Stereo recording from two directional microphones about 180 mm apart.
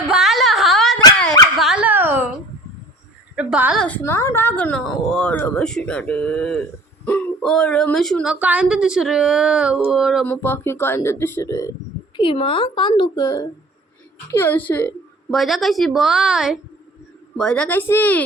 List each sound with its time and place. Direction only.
0.0 s a sound: centre (ahead or behind)
1.5 s dog: 5° right (ahead or behind)
3.3 s a woman's voice: 5° right (ahead or behind)
3.8 s a woman's voice: 10° left (ahead or behind)
10.2 s speech: 10° left (ahead or behind)
12.1 s a woman's voice: 30° left (ahead or behind); by 15.4 s 10° left (ahead or behind)
15.4 s a woman's voice: centre (ahead or behind)